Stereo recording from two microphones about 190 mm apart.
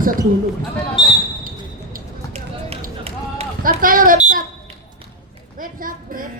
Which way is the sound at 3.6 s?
45° right (ahead or behind).